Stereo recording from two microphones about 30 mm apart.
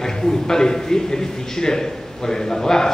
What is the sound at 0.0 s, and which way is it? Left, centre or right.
A man's voice, centre.